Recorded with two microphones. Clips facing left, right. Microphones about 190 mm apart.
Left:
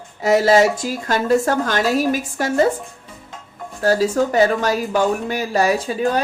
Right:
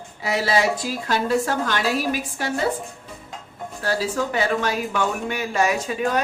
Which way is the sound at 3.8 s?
45° left (ahead or behind).